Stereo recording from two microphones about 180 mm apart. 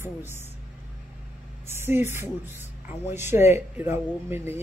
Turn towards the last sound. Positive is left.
turn(degrees=-10)  # may be behind; listen again after turning